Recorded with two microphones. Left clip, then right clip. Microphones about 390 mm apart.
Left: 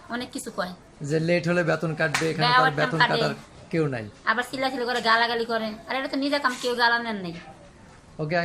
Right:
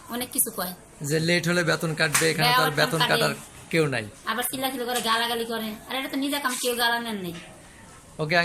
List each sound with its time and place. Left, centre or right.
0.1 s a woman's voice: centre